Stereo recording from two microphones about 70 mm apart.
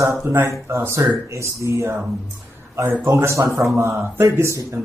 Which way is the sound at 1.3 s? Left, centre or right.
Right.